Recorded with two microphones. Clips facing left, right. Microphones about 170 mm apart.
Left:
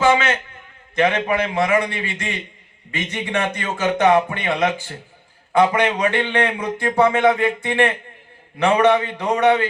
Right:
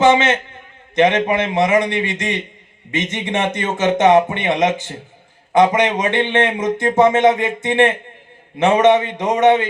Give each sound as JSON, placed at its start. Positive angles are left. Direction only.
{"t": 0.0, "sound": "speech", "side_deg": -20}